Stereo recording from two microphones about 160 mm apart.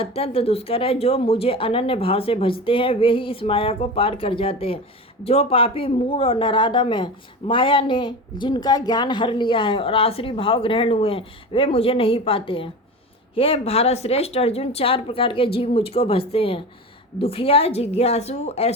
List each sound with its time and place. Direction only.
0.0 s speech: 40° left (ahead or behind)